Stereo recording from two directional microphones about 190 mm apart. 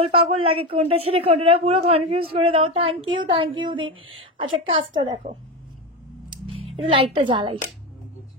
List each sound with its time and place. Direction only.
0.1 s a woman's voice: 30° right (ahead or behind)
6.3 s speech: 30° right (ahead or behind)